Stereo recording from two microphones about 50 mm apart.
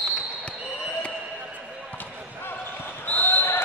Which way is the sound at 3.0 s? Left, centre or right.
Left.